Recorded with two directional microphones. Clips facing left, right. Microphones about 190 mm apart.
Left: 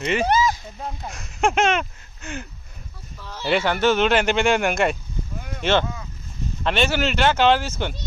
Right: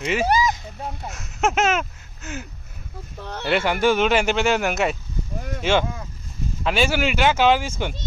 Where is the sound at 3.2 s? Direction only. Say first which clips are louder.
Right 1 dB; 60° right (ahead or behind).